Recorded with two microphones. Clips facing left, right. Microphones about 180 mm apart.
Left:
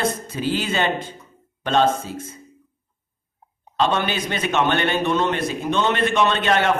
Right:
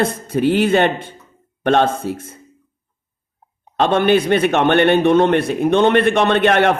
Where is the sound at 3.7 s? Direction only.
55° right (ahead or behind).